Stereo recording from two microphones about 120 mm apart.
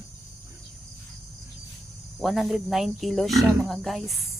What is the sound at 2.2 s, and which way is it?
Speech, centre (ahead or behind).